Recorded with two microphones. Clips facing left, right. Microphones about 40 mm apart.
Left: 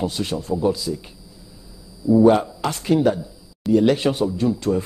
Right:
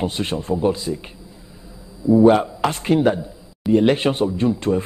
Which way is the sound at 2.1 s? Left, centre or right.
Right.